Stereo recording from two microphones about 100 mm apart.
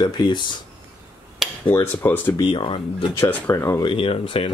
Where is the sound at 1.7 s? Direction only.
20° left (ahead or behind).